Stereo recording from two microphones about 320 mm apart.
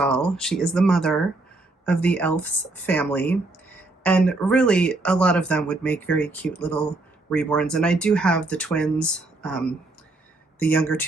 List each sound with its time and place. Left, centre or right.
0.0 s speech: centre